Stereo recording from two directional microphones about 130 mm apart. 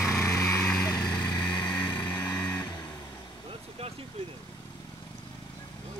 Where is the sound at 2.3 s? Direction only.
30° left (ahead or behind).